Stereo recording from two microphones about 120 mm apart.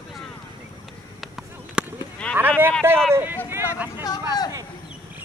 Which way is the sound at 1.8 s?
5° right (ahead or behind).